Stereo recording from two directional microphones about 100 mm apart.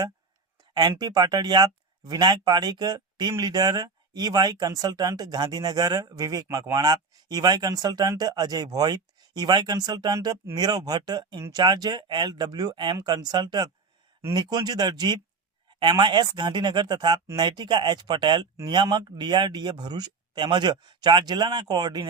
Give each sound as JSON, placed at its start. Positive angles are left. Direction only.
{"t": 0.7, "sound": "speech", "side_deg": -45}